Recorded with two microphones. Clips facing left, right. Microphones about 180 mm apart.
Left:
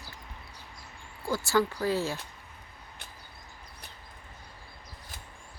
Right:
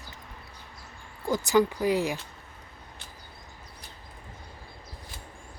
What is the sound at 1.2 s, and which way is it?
Speech, 20° right (ahead or behind).